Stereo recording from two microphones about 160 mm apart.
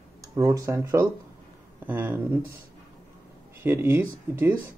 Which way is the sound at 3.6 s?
15° right (ahead or behind).